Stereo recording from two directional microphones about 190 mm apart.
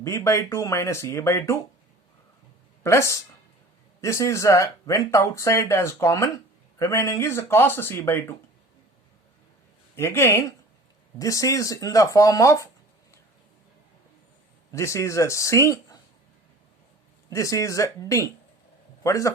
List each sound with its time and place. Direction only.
0.0 s speech: 15° left (ahead or behind)
2.8 s speech: 15° left (ahead or behind)
9.9 s speech: 15° left (ahead or behind)
14.7 s speech: 15° left (ahead or behind)
17.2 s speech: 15° left (ahead or behind)